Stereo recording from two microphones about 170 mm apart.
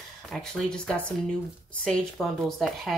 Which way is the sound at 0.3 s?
5° left (ahead or behind).